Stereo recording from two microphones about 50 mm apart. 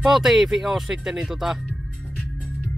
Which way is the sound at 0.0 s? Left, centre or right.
Centre.